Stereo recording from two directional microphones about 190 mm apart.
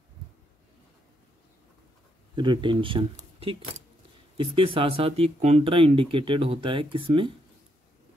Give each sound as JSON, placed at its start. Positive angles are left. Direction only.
{"t": 2.3, "sound": "speech", "side_deg": -25}